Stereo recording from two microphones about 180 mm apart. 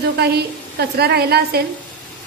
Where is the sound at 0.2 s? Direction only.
65° right (ahead or behind).